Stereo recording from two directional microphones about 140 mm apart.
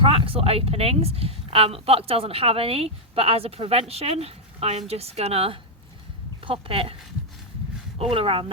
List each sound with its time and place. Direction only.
0.0 s speech: 40° right (ahead or behind)
7.9 s speech: 40° right (ahead or behind)